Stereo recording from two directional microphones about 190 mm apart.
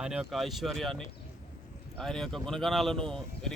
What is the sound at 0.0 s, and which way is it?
Speech, 5° right (ahead or behind).